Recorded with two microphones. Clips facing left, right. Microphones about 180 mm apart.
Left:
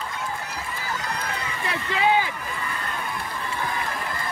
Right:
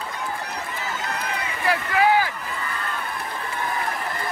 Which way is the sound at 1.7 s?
25° left (ahead or behind).